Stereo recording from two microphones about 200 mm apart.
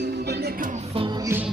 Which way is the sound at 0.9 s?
25° right (ahead or behind).